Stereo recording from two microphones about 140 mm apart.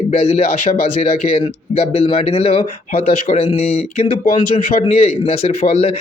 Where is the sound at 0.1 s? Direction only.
50° left (ahead or behind).